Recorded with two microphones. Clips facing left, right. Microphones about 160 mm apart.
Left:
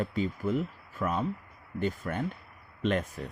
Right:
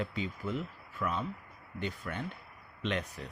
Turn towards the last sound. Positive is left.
turn(degrees=50)  # may be behind; listen again after turning